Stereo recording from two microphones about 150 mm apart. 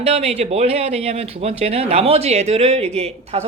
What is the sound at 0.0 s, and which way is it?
A woman's voice, 45° right (ahead or behind).